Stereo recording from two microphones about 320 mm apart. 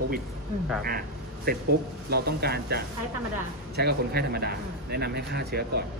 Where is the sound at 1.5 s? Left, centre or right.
Right.